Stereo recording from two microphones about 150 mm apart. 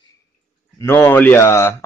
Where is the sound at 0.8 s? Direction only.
15° left (ahead or behind).